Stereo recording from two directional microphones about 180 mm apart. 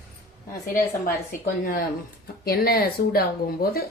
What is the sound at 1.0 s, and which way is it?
Speech, 55° left (ahead or behind).